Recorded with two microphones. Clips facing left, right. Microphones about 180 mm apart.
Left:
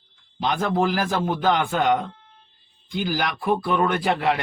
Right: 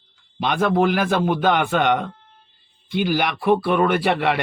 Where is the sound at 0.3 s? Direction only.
65° right (ahead or behind).